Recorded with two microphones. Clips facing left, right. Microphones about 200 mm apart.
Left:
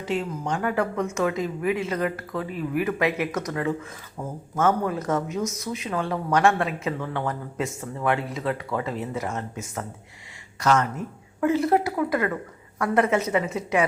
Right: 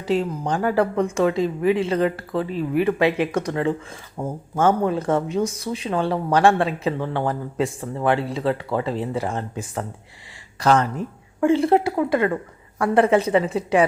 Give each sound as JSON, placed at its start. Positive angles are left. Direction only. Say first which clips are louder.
{"t": 0.0, "sound": "a woman's voice", "louder": "right 5 dB", "side_deg": -35}